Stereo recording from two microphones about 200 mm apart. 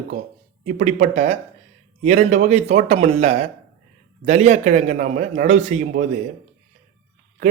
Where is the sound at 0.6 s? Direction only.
40° right (ahead or behind).